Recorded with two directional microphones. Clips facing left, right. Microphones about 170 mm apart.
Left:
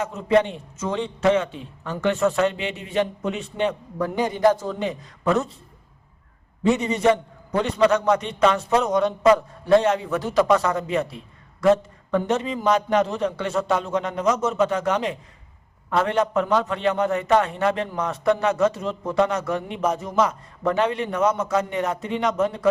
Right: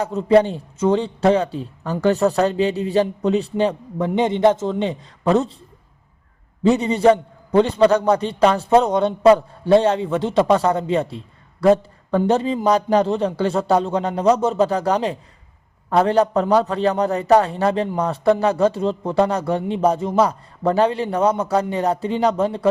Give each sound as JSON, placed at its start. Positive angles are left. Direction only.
{"t": 0.0, "sound": "a man's voice", "side_deg": -35}
{"t": 6.6, "sound": "a man's voice", "side_deg": -30}